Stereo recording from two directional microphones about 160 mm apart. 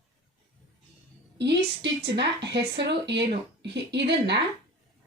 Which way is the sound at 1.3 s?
90° right.